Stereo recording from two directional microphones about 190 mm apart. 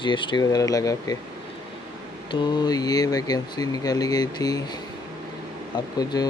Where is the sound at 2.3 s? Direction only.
25° left (ahead or behind).